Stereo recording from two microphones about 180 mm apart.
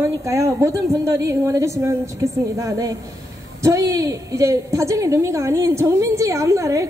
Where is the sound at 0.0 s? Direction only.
15° right (ahead or behind).